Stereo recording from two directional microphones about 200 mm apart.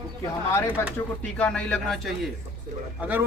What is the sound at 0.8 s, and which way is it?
Speech, 15° left (ahead or behind).